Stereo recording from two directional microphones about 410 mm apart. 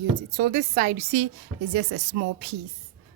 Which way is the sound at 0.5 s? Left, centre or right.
Right.